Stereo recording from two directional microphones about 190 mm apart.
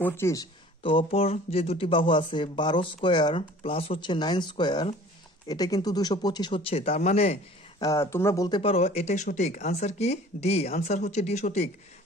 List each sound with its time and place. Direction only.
0.0 s speech: 15° left (ahead or behind); by 7.3 s 35° left (ahead or behind)
7.8 s speech: 15° left (ahead or behind); by 11.7 s 35° left (ahead or behind)